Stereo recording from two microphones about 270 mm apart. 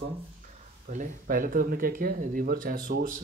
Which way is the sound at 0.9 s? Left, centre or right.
Right.